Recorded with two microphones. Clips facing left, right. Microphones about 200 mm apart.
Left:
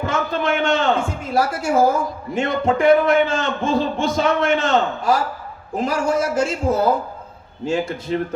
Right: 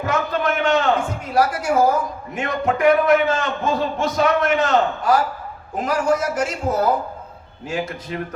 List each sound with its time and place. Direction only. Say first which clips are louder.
0.0 s a man's voice: even; 25° left (ahead or behind)